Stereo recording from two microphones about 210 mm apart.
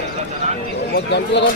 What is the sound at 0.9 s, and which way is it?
Speech, 55° left (ahead or behind).